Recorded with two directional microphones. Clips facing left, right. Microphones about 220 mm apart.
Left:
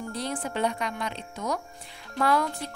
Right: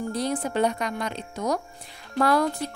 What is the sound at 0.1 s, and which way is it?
Speech, 40° right (ahead or behind).